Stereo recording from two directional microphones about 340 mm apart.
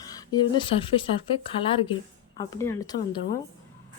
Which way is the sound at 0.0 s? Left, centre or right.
Centre.